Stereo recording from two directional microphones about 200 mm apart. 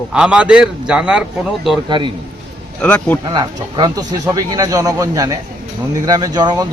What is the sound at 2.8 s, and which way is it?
Speech, 10° left (ahead or behind).